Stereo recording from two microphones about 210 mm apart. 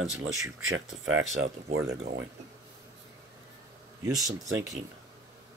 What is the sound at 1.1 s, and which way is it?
Speech, 70° right (ahead or behind).